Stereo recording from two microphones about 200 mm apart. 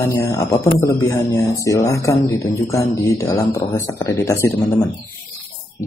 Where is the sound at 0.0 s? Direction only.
15° left (ahead or behind).